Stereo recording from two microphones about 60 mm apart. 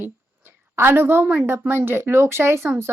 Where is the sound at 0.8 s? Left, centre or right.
Right.